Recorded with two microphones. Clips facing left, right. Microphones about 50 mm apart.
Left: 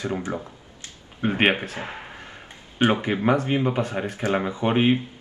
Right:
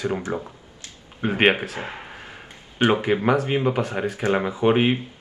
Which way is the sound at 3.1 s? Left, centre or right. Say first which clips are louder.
Right 4 dB; centre.